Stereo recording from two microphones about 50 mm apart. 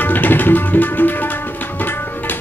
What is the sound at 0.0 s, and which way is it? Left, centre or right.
Tabla, left.